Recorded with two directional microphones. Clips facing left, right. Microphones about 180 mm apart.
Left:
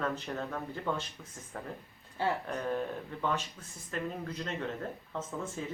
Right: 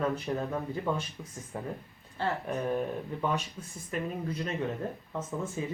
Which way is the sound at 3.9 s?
15° right (ahead or behind).